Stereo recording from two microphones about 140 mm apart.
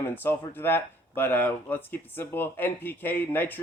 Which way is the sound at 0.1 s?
15° left (ahead or behind).